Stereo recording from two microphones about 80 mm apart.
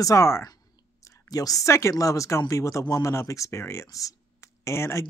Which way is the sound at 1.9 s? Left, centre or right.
Left.